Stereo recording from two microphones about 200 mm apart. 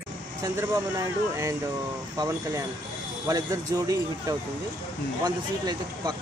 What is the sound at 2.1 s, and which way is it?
Speech, 15° right (ahead or behind).